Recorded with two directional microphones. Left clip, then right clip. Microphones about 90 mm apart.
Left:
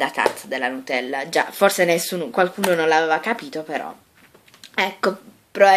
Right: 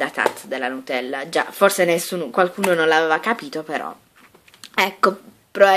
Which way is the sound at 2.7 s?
40° right (ahead or behind).